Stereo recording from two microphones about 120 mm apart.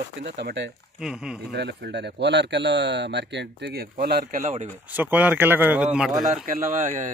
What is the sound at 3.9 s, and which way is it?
Speech, 80° right.